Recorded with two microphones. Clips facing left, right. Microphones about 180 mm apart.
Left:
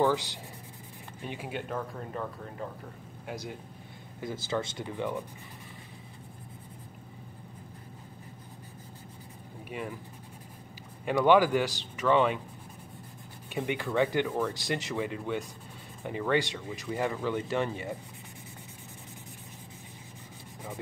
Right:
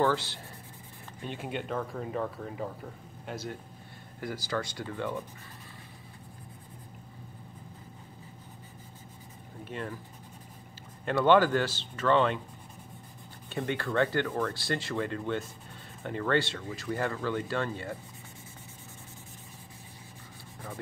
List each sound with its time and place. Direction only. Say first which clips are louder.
0.0 s speech: left 1 dB; 15° left (ahead or behind); by 2.7 s 5° right (ahead or behind)
3.3 s speech: right 1 dB; 10° left (ahead or behind)
4.2 s speech: left 1 dB; 20° left (ahead or behind)
9.7 s speech: even; 10° left (ahead or behind)
11.1 s speech: even; 10° left (ahead or behind)
13.5 s speech: even; 15° left (ahead or behind)